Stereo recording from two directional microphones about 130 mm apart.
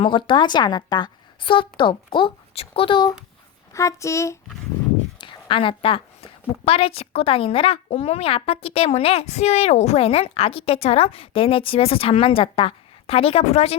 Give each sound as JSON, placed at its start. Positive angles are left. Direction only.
{"t": 0.0, "sound": "a woman's voice", "side_deg": 40}
{"t": 3.7, "sound": "speech", "side_deg": 25}
{"t": 5.2, "sound": "a woman's voice", "side_deg": 40}